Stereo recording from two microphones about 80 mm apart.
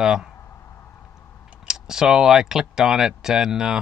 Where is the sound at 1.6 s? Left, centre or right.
Centre.